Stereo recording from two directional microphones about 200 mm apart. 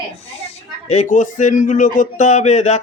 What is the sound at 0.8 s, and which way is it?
A man's voice, 35° left (ahead or behind).